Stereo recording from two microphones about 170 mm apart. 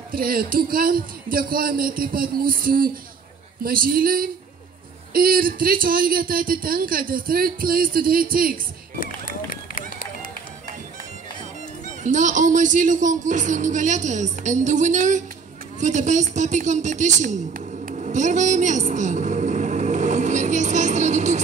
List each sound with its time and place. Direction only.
0.1 s speech: 60° right (ahead or behind)
9.0 s run: 55° left (ahead or behind)
12.0 s a man's voice: 45° right (ahead or behind)